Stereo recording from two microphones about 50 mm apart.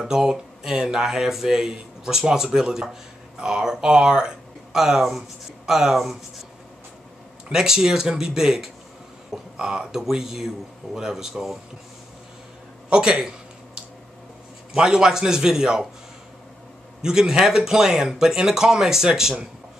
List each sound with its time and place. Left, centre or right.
0.0 s speech: centre
7.5 s speech: centre
12.9 s speech: centre
14.7 s speech: centre
17.0 s speech: centre